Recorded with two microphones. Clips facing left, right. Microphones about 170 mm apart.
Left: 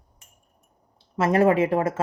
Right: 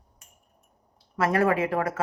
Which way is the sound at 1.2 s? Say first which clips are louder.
Left 4 dB; 25° left (ahead or behind).